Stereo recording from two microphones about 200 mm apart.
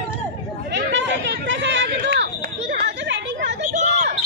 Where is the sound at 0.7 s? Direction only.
65° right (ahead or behind).